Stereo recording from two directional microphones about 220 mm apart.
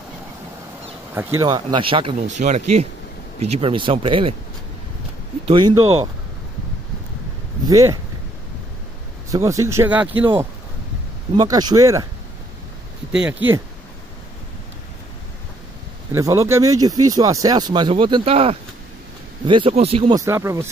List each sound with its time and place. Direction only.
1.1 s speech: 15° right (ahead or behind)
5.5 s speech: 20° right (ahead or behind)
7.6 s speech: 15° right (ahead or behind)
9.3 s speech: 15° right (ahead or behind)
13.1 s speech: 5° right (ahead or behind)
16.1 s speech: 15° right (ahead or behind)
20.2 s speech: 10° right (ahead or behind)